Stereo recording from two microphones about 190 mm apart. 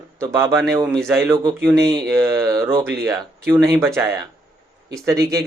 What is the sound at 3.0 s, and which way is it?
Mantra, 20° right (ahead or behind).